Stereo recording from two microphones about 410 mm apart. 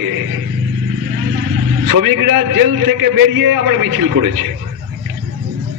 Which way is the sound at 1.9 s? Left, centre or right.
Right.